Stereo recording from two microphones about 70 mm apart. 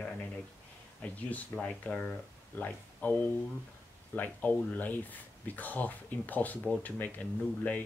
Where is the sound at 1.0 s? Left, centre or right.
Left.